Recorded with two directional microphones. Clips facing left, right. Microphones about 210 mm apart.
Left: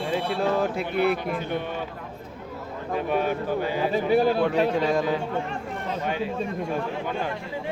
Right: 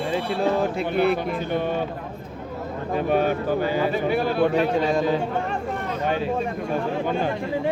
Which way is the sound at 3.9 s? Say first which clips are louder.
Left 2 dB; 35° left (ahead or behind).